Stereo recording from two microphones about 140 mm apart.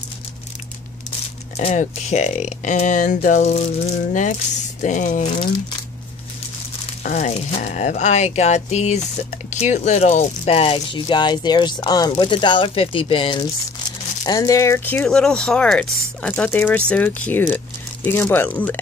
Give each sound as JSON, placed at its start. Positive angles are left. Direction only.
{"t": 1.6, "sound": "speech", "side_deg": 55}
{"t": 7.0, "sound": "speech", "side_deg": 60}
{"t": 14.2, "sound": "speech", "side_deg": 25}